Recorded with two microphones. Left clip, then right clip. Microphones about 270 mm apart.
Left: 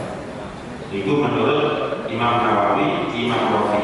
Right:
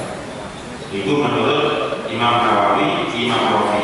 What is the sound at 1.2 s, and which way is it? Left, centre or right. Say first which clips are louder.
Mantra: right 2 dB; centre.